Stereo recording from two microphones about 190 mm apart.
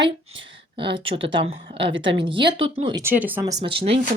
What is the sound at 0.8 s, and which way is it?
Speech, 70° right (ahead or behind).